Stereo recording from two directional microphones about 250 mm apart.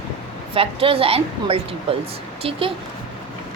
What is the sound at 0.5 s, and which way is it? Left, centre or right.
A woman's voice, right.